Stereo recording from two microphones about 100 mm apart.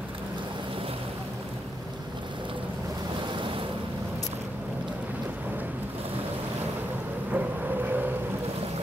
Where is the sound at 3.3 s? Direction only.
60° right (ahead or behind).